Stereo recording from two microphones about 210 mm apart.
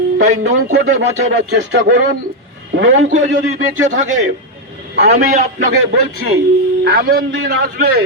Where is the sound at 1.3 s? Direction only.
60° right (ahead or behind).